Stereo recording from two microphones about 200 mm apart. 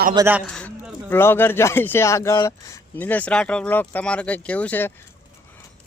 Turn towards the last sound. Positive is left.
turn(degrees=10)  # may be behind; listen again after turning